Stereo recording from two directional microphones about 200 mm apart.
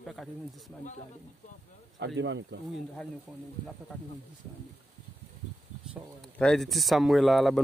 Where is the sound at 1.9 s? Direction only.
65° right (ahead or behind).